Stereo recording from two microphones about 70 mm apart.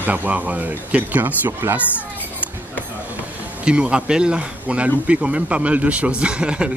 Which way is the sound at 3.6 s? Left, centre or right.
Centre.